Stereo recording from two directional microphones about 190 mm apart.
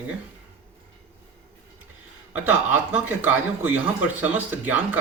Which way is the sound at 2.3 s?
10° right (ahead or behind).